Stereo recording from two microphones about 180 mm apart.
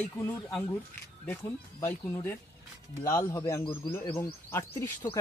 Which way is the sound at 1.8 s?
10° left (ahead or behind).